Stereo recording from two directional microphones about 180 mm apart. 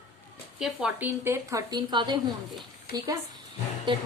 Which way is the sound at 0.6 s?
5° right (ahead or behind).